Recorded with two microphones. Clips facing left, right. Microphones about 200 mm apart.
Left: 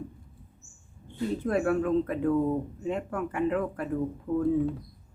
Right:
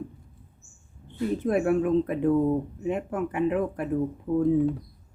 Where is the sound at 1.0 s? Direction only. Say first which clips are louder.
Right 3 dB; 20° right (ahead or behind).